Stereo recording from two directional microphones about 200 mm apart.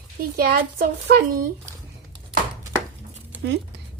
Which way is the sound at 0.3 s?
50° right (ahead or behind).